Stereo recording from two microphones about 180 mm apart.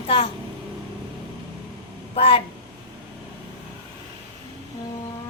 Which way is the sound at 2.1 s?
30° left (ahead or behind).